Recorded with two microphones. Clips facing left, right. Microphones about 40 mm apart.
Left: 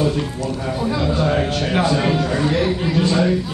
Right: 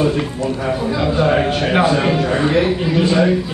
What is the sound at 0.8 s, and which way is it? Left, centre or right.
A man's voice, centre.